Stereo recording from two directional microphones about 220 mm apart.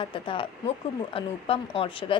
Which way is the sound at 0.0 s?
20° left (ahead or behind).